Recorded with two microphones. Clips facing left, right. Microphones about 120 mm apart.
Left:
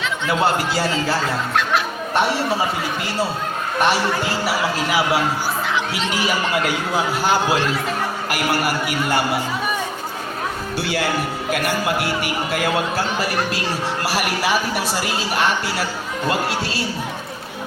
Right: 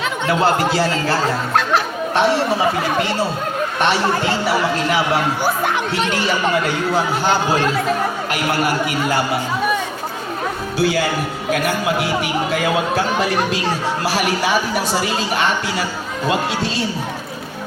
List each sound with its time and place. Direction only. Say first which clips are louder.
0.3 s a man's voice: right 3 dB; centre (ahead or behind)
5.4 s music: right 4 dB; 55° right (ahead or behind)
6.1 s a man's voice: right 2 dB; 10° left (ahead or behind)
10.8 s a man's voice: right 4 dB; centre (ahead or behind)